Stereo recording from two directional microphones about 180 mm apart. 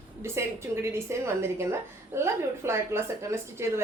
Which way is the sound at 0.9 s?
15° right (ahead or behind).